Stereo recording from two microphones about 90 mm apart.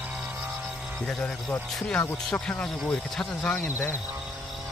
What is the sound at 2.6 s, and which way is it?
Speech, 10° left (ahead or behind).